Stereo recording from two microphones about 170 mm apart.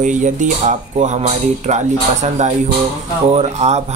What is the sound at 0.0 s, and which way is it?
Speech, 45° right (ahead or behind).